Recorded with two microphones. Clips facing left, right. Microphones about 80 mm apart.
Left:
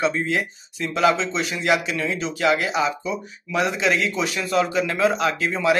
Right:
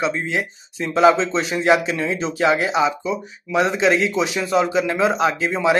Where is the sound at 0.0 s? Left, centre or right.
Centre.